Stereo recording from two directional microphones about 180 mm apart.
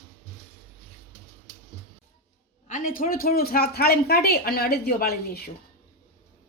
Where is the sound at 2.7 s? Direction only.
50° left (ahead or behind).